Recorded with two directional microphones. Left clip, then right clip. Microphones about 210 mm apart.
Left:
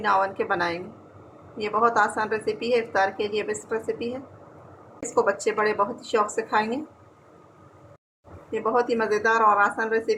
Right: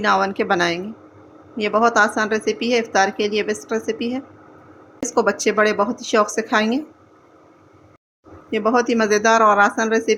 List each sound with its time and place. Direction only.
0.0 s speech: 45° right (ahead or behind)
5.1 s speech: 50° right (ahead or behind)
8.4 s speech: 50° right (ahead or behind)